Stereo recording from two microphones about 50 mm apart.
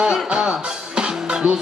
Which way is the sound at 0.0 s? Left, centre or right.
Centre.